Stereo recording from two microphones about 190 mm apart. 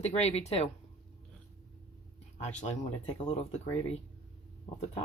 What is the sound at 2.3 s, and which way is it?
Speech, 40° left (ahead or behind).